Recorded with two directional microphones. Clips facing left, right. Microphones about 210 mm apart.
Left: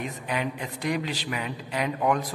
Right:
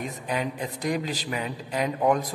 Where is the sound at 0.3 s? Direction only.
40° right (ahead or behind).